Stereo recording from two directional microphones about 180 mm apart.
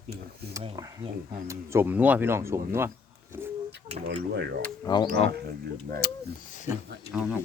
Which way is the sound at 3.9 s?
40° right (ahead or behind).